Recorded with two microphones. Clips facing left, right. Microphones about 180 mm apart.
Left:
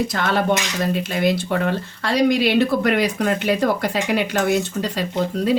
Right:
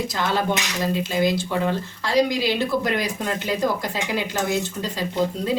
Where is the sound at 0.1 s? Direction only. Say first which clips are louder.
Left 3 dB; 60° left (ahead or behind).